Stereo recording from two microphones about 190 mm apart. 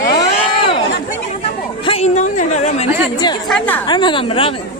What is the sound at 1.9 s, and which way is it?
A woman's voice, 35° left (ahead or behind).